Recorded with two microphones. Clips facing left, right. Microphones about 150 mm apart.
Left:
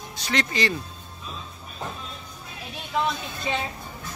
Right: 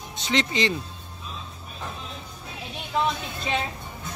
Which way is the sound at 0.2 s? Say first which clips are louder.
Right 1 dB; 20° right (ahead or behind).